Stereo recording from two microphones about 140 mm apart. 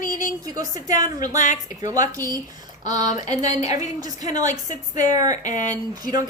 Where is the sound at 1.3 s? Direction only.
60° left (ahead or behind).